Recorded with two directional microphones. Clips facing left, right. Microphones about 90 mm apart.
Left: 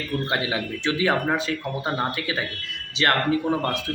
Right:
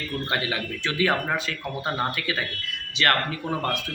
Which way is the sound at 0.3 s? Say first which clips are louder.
Right 1 dB; 20° left (ahead or behind).